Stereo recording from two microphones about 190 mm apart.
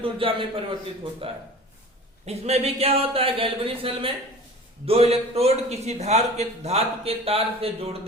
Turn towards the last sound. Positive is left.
turn(degrees=-30)  # may be behind; listen again after turning